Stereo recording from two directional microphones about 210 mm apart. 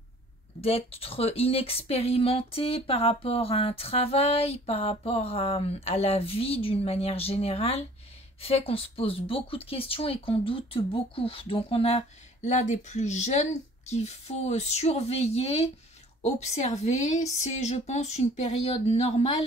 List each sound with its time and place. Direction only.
0.6 s a woman's voice: 30° left (ahead or behind)